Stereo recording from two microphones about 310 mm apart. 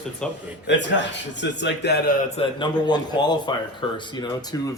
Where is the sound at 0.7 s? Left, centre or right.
Left.